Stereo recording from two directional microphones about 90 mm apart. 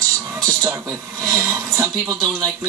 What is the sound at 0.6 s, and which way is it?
Speech, 35° right (ahead or behind).